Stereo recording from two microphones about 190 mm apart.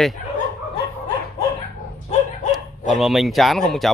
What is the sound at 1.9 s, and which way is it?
Dog, 40° left (ahead or behind).